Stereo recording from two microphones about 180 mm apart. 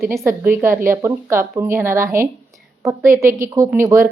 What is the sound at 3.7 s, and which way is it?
Speech, 15° right (ahead or behind).